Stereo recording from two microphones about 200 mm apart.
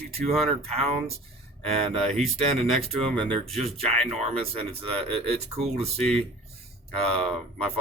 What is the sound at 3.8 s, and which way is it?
Speech, 30° right (ahead or behind).